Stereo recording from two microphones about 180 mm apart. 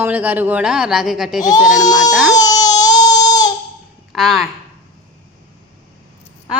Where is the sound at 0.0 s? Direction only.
10° right (ahead or behind).